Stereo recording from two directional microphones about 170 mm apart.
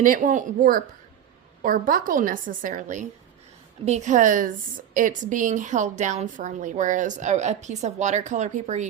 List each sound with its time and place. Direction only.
0.0 s a woman's voice: 55° right (ahead or behind)